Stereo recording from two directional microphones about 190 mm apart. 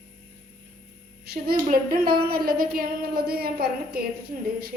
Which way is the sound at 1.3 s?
50° right (ahead or behind).